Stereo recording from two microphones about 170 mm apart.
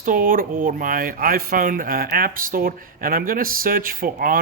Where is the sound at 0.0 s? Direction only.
55° right (ahead or behind).